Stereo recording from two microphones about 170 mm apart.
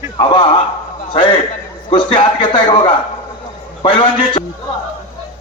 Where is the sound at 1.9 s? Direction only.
30° left (ahead or behind).